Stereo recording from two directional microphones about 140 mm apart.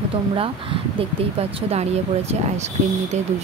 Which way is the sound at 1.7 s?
50° right (ahead or behind).